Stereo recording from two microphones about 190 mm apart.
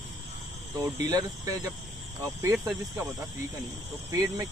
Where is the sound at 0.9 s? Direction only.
20° right (ahead or behind).